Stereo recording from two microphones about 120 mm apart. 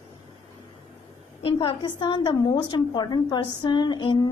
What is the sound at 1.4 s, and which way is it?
A woman's voice, 45° left (ahead or behind).